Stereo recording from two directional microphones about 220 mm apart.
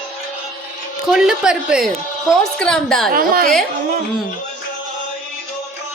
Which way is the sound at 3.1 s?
40° right (ahead or behind).